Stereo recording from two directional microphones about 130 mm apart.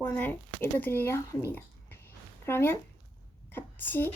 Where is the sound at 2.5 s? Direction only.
20° left (ahead or behind).